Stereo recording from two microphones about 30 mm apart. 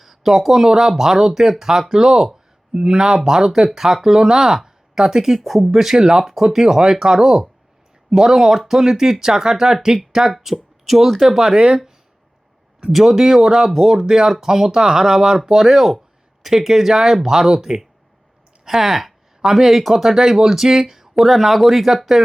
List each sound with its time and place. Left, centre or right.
0.0 s speech: centre
5.4 s speech: centre
6.0 s speech: centre
10.3 s speech: centre; by 11.8 s right
12.9 s speech: centre
13.9 s speech: right; by 16.0 s centre
16.4 s speech: centre
21.2 s speech: centre